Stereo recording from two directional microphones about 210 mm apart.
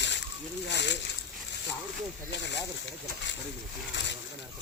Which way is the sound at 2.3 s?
60° left (ahead or behind).